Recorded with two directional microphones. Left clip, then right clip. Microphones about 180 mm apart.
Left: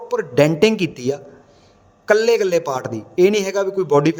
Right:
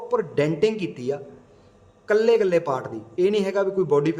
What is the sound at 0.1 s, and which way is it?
A man's voice, 40° left (ahead or behind).